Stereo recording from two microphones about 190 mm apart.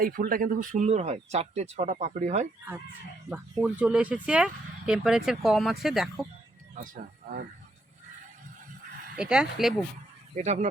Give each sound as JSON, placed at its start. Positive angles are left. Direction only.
{"t": 0.0, "sound": "speech", "side_deg": -50}
{"t": 3.2, "sound": "speech", "side_deg": -5}
{"t": 9.1, "sound": "speech", "side_deg": -5}
{"t": 10.3, "sound": "speech", "side_deg": -40}